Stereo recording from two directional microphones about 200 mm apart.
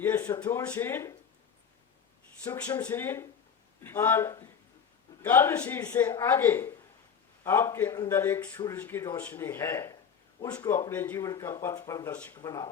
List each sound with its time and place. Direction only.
0.0 s a sound: 15° left (ahead or behind)
0.7 s a man's voice: 10° left (ahead or behind)
2.4 s a man's voice: 15° left (ahead or behind)
12.4 s speech: 20° left (ahead or behind)